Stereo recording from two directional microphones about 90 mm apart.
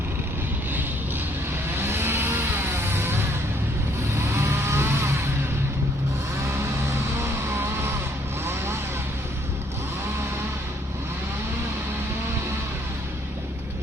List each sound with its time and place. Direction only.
1.7 s music: 25° right (ahead or behind)
4.2 s vehicle: 30° right (ahead or behind)
6.9 s vehicle: 30° right (ahead or behind)